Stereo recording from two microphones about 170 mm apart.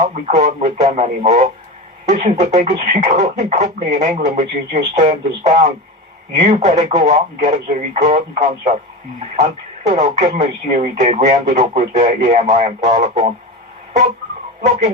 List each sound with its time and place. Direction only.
0.1 s speech: 45° right (ahead or behind)